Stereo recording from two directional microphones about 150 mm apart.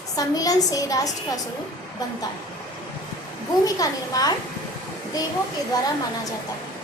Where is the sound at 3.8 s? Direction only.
25° left (ahead or behind).